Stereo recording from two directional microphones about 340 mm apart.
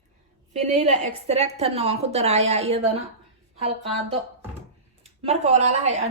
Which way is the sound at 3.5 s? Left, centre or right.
Centre.